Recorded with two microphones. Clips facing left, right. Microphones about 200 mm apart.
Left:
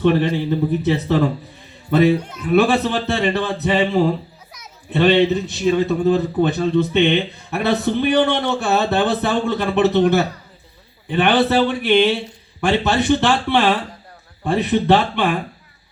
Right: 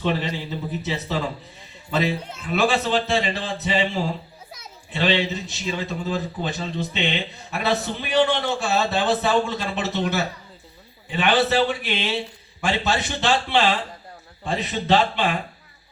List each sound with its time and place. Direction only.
0.0 s a man's voice: 55° left (ahead or behind)